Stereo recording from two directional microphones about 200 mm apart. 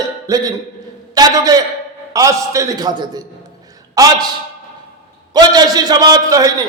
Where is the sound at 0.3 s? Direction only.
20° right (ahead or behind).